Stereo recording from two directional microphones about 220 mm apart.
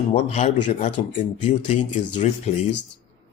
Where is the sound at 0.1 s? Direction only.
30° left (ahead or behind).